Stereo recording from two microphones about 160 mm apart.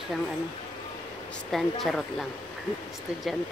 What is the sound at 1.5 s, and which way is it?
Speech, centre (ahead or behind).